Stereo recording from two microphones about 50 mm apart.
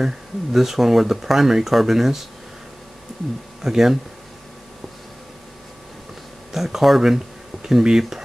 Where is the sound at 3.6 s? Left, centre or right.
Centre.